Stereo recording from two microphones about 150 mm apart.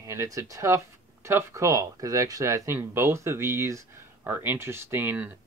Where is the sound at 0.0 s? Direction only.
20° right (ahead or behind).